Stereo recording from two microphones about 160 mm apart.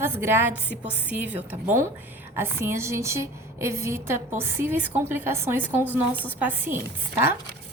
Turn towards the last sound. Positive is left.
turn(degrees=-15)  # may be behind; listen again after turning